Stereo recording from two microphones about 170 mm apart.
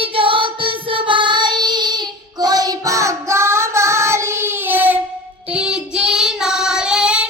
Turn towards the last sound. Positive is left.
turn(degrees=-5)  # may be behind; listen again after turning